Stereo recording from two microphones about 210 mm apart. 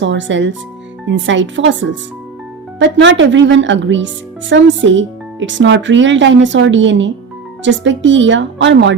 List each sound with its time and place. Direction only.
0.0 s a woman's voice: 60° right (ahead or behind)